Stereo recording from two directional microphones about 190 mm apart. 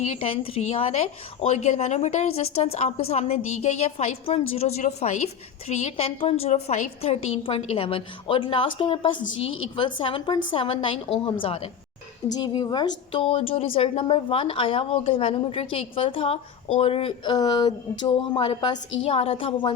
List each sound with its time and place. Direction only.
0.0 s a woman's voice: 30° left (ahead or behind)